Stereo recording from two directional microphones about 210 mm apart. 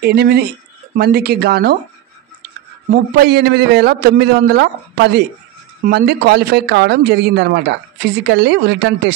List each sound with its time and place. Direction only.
0.0 s speech: 50° right (ahead or behind)
2.9 s speech: 50° right (ahead or behind)
5.9 s speech: 50° right (ahead or behind)